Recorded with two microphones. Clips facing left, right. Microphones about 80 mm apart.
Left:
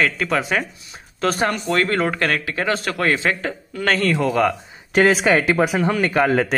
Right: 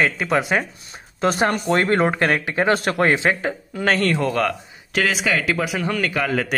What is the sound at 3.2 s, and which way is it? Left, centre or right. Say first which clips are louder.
Speech: right 1 dB; centre.